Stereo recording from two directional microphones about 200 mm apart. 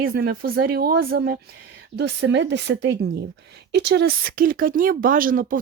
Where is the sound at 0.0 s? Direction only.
50° right (ahead or behind).